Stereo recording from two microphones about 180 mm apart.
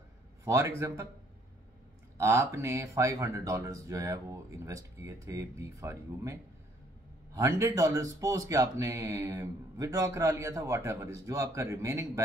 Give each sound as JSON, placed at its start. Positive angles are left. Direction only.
{"t": 0.5, "sound": "speech", "side_deg": -15}
{"t": 2.1, "sound": "speech", "side_deg": -15}
{"t": 7.3, "sound": "speech", "side_deg": -15}